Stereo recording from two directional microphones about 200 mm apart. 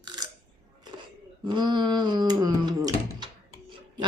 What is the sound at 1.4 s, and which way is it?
Speech, 20° right (ahead or behind).